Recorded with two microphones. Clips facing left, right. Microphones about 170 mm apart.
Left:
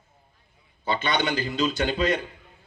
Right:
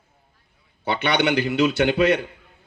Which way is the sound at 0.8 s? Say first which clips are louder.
Right 4 dB; 70° right (ahead or behind).